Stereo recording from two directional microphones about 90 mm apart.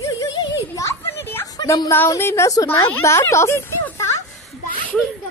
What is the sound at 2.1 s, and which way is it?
A woman's voice, 30° left (ahead or behind).